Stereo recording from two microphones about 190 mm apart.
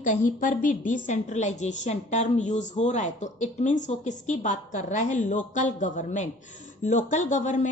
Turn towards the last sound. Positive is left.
turn(degrees=40)  # may be behind; listen again after turning